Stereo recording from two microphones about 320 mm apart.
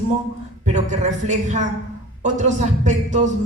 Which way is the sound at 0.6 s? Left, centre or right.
Right.